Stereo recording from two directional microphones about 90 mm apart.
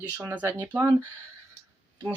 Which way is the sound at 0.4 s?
25° right (ahead or behind).